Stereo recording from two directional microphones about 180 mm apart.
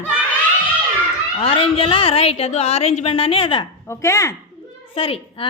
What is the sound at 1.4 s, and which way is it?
Speech, 30° left (ahead or behind).